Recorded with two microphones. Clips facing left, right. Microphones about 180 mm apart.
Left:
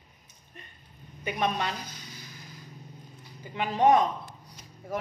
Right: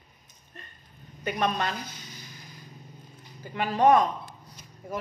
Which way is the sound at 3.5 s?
20° left (ahead or behind).